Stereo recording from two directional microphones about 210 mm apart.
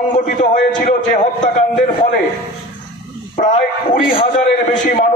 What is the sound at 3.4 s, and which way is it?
A man's voice, 35° left (ahead or behind).